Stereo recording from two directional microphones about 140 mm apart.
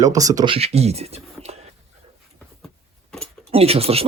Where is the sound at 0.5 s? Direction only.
45° right (ahead or behind).